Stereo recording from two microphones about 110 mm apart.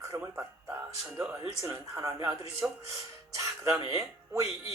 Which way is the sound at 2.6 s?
15° right (ahead or behind).